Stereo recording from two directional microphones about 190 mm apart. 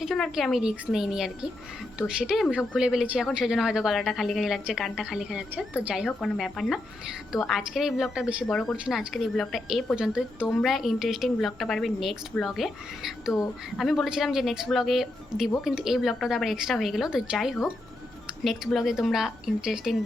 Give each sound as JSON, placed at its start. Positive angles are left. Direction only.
{"t": 0.0, "sound": "a woman's voice", "side_deg": 0}